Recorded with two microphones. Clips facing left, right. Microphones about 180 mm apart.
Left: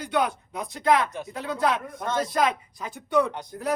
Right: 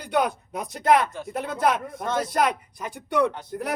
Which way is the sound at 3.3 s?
15° left (ahead or behind).